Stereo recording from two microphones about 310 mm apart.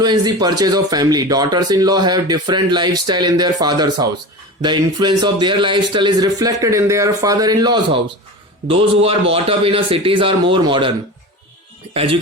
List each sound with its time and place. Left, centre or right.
0.0 s speech: centre